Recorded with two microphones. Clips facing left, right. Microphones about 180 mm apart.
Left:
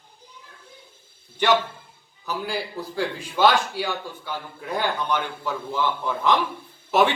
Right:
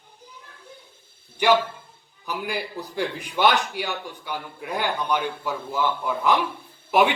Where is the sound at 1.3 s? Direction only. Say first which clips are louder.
Right 1 dB; 10° right (ahead or behind).